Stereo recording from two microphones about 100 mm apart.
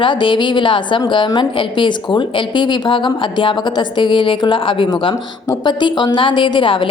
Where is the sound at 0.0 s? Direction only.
55° left (ahead or behind).